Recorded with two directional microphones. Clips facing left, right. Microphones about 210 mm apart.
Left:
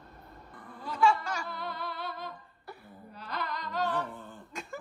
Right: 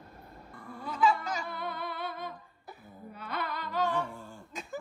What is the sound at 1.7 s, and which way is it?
Humming, 55° right (ahead or behind).